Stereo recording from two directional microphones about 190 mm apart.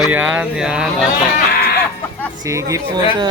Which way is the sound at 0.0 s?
10° right (ahead or behind).